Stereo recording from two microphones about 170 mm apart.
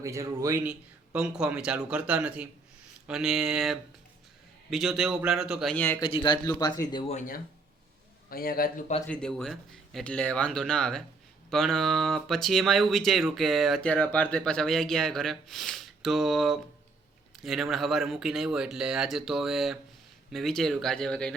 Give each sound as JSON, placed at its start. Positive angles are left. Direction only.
{"t": 0.0, "sound": "a man's voice", "side_deg": -20}
{"t": 5.7, "sound": "speech", "side_deg": 10}
{"t": 6.0, "sound": "speech", "side_deg": 25}
{"t": 7.1, "sound": "a man's voice", "side_deg": 50}
{"t": 9.0, "sound": "speech", "side_deg": 5}